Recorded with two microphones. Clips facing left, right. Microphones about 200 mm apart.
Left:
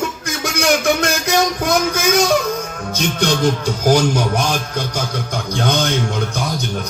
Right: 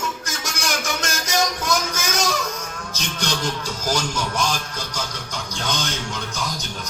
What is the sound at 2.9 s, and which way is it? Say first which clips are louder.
A man's voice: left 10 dB; 60° left (ahead or behind).